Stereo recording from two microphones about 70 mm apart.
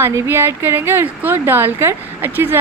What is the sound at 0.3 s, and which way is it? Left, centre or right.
Speech, right.